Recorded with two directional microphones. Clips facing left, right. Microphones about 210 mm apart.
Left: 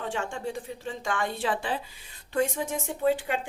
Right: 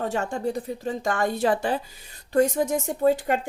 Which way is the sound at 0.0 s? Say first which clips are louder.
Right 6 dB; 40° right (ahead or behind).